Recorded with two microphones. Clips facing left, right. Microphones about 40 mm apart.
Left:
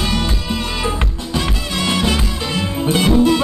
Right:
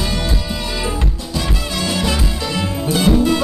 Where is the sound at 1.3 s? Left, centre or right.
Left.